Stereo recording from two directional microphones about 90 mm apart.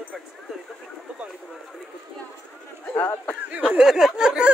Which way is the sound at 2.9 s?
25° left (ahead or behind).